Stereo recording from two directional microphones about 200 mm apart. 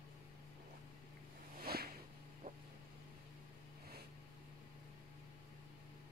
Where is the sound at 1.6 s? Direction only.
50° right (ahead or behind).